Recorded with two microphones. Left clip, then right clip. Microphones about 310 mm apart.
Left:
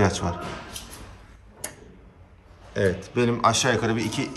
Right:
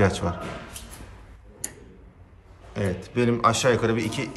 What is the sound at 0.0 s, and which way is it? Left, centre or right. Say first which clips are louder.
Speech: even; centre.